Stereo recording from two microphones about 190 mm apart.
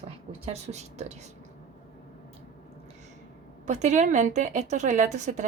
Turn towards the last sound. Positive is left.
turn(degrees=-40)  # may be behind; listen again after turning